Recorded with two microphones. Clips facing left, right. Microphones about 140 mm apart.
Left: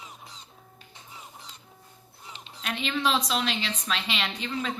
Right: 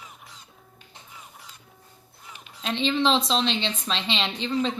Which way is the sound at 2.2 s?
25° left (ahead or behind).